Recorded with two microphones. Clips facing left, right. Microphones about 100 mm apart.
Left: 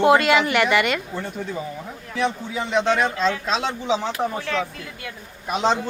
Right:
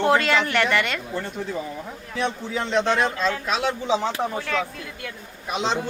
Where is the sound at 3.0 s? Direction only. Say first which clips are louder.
Left 2 dB; 25° left (ahead or behind).